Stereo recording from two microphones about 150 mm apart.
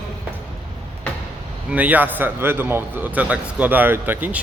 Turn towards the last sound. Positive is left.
turn(degrees=-10)  # may be behind; listen again after turning